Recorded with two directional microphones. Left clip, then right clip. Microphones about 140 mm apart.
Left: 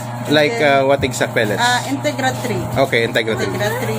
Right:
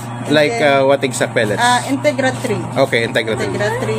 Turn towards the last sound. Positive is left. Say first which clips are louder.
# even
turn(degrees=0)  # may be behind; listen again after turning